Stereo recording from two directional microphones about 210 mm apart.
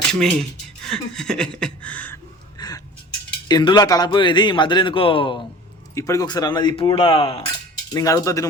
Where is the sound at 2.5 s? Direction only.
20° left (ahead or behind).